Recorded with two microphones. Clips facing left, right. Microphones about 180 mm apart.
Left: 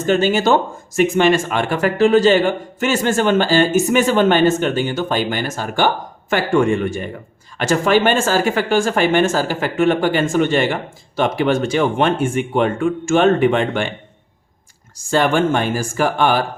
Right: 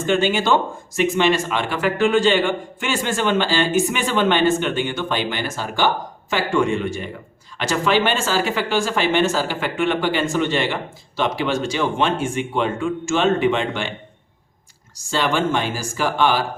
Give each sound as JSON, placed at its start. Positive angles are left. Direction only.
{"t": 0.0, "sound": "speech", "side_deg": 40}
{"t": 15.1, "sound": "speech", "side_deg": 50}